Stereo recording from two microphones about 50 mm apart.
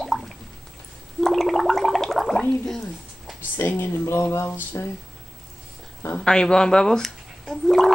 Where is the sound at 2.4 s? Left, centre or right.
Centre.